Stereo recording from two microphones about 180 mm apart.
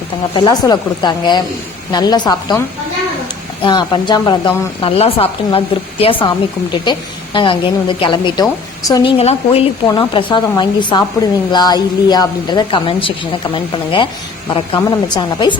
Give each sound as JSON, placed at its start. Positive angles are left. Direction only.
{"t": 0.3, "sound": "a woman's voice", "side_deg": 25}
{"t": 7.3, "sound": "a woman's voice", "side_deg": 25}